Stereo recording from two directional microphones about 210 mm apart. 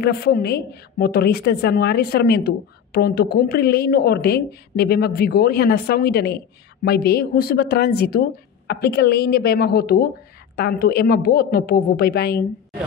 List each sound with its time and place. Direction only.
0.0 s a woman's voice: 50° left (ahead or behind)